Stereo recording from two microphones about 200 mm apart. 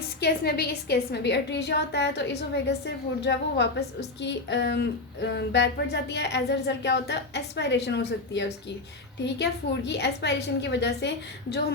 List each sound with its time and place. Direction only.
0.2 s a woman's voice: 55° left (ahead or behind)